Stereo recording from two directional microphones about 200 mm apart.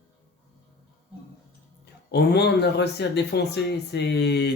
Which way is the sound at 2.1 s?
55° left (ahead or behind).